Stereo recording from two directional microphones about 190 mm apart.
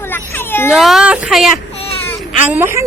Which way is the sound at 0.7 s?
Centre (ahead or behind).